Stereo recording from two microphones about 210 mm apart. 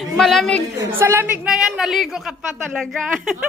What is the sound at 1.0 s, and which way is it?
A woman's voice, 10° right (ahead or behind).